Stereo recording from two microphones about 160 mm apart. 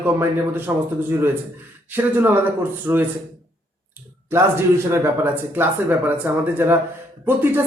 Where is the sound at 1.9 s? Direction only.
10° right (ahead or behind).